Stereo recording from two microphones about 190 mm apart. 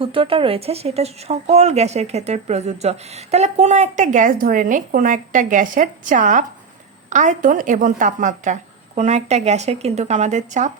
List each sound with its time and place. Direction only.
0.0 s a woman's voice: 30° right (ahead or behind)